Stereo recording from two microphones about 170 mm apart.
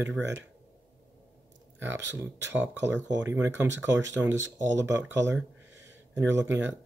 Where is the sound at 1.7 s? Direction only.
10° right (ahead or behind).